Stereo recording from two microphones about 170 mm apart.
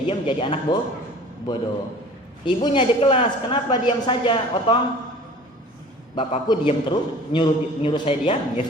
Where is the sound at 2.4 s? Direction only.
30° left (ahead or behind).